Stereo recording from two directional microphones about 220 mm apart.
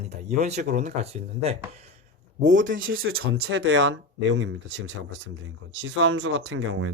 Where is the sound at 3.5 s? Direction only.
55° right (ahead or behind).